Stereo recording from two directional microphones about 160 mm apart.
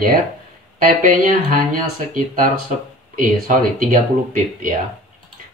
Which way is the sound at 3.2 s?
60° right (ahead or behind).